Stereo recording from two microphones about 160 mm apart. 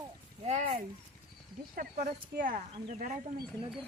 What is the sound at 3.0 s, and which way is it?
Speech, 60° right (ahead or behind).